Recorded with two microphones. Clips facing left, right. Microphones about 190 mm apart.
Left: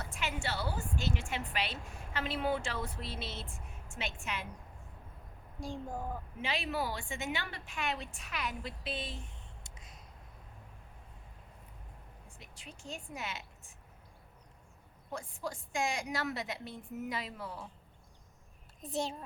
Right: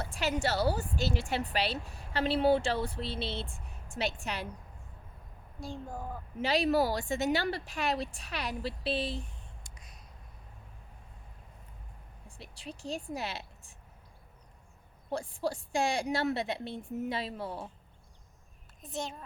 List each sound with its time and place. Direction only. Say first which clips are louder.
0.0 s a woman's voice: right 7 dB; 35° right (ahead or behind)
5.5 s speech: even; 15° left (ahead or behind)
6.4 s a woman's voice: right 9 dB; 40° right (ahead or behind)
9.6 s a sound: left 1 dB; 25° left (ahead or behind)
12.4 s a woman's voice: right 9 dB; 35° right (ahead or behind)
15.1 s a woman's voice: right 7 dB; 30° right (ahead or behind)
18.8 s a child's voice: left 2 dB; 35° left (ahead or behind)